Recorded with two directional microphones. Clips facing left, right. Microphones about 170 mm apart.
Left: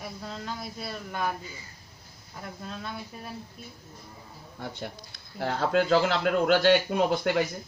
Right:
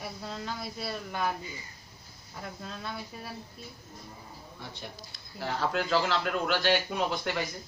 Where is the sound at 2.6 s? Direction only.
Centre (ahead or behind).